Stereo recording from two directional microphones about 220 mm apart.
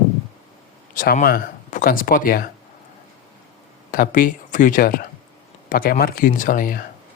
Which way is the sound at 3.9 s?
40° left (ahead or behind).